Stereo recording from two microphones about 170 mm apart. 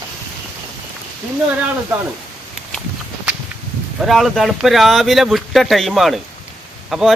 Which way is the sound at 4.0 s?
Centre (ahead or behind).